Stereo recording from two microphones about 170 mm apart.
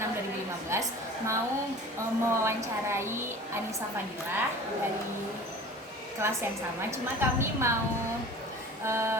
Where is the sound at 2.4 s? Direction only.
15° right (ahead or behind).